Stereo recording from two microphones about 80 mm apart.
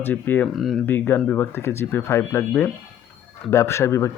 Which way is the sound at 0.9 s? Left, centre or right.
Left.